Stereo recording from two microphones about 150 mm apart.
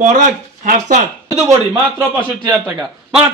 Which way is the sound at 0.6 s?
55° right (ahead or behind).